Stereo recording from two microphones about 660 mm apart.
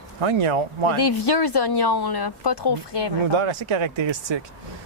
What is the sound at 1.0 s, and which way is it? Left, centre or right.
Speech, left.